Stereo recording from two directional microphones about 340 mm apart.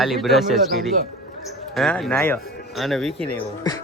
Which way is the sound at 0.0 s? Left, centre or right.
Centre.